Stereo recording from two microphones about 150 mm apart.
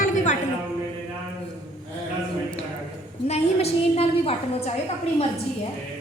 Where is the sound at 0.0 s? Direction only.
55° left (ahead or behind).